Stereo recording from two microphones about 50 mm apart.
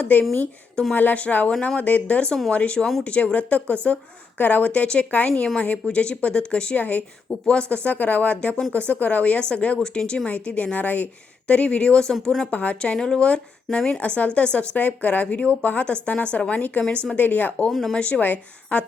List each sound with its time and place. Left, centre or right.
0.0 s a woman's voice: left; by 12.5 s centre
12.5 s a woman's voice: left
12.8 s a woman's voice: centre; by 17.7 s left
17.7 s speech: centre
17.9 s a woman's voice: left
18.2 s a woman's voice: left